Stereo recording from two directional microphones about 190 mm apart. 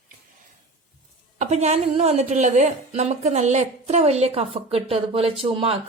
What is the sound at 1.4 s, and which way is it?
A woman's voice, 35° right (ahead or behind).